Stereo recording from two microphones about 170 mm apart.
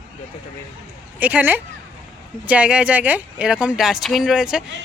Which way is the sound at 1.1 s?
10° right (ahead or behind).